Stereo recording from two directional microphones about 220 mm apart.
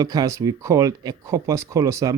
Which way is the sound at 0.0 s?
15° right (ahead or behind).